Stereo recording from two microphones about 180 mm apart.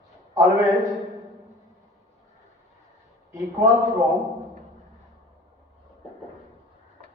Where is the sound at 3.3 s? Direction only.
20° right (ahead or behind).